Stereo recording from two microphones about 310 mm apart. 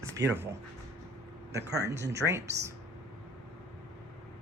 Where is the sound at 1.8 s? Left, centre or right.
Centre.